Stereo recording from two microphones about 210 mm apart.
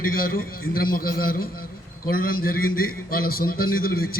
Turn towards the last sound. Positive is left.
turn(degrees=45)  # may be behind; listen again after turning